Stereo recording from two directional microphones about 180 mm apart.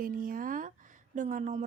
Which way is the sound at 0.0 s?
50° right (ahead or behind).